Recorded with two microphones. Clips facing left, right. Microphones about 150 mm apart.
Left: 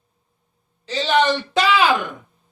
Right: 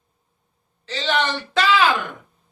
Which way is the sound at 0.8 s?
15° left (ahead or behind).